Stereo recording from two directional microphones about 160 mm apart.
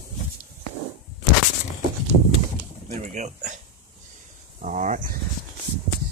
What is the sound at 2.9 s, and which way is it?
Speech, 45° right (ahead or behind).